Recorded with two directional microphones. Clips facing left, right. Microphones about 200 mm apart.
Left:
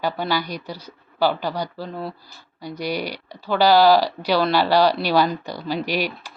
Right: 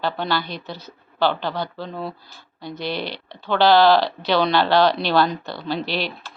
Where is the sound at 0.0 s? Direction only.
10° left (ahead or behind).